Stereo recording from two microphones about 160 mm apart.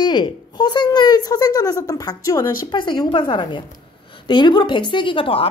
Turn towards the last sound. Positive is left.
turn(degrees=35)  # may be behind; listen again after turning